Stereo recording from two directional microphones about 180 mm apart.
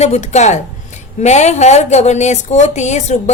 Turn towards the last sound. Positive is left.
turn(degrees=40)  # may be behind; listen again after turning